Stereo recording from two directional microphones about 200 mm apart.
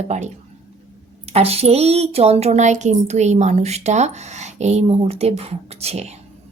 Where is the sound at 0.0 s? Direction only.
35° right (ahead or behind).